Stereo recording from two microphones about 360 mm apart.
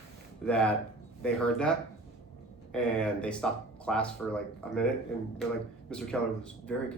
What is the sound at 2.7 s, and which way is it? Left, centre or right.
Speech, centre.